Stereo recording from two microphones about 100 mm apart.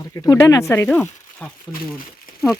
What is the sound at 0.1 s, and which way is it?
Speech, 35° left (ahead or behind).